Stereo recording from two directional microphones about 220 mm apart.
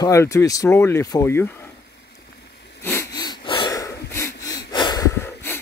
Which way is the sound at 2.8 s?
10° left (ahead or behind).